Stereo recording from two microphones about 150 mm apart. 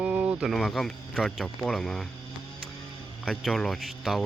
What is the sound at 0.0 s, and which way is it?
Speech, 10° right (ahead or behind).